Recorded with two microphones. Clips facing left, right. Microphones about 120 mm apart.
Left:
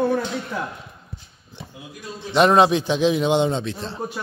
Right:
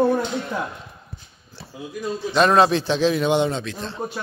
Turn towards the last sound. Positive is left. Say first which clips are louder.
# left 2 dB
turn(degrees=30)  # may be behind; listen again after turning